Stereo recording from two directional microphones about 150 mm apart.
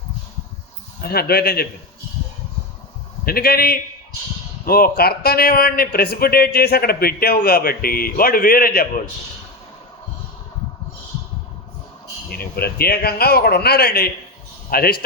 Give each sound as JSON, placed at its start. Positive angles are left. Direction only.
{"t": 1.0, "sound": "a man's voice", "side_deg": 90}
{"t": 3.2, "sound": "a man's voice", "side_deg": 85}
{"t": 12.3, "sound": "a man's voice", "side_deg": 90}